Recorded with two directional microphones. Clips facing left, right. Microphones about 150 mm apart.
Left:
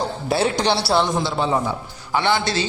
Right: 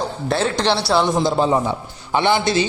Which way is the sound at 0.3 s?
10° left (ahead or behind).